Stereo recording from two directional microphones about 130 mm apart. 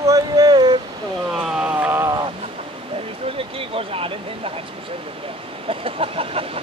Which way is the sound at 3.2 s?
45° right (ahead or behind).